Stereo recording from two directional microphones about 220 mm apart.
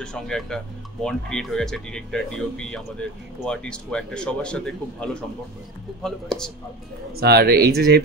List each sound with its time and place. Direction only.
0.0 s speech: 5° left (ahead or behind)
7.2 s speech: 45° right (ahead or behind)